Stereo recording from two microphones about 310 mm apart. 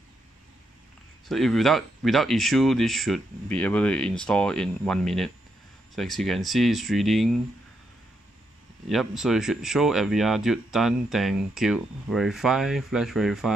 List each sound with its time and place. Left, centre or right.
1.3 s speech: centre
8.8 s speech: centre